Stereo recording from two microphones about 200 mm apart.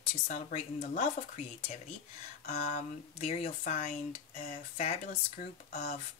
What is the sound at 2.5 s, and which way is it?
Speech, 35° left (ahead or behind).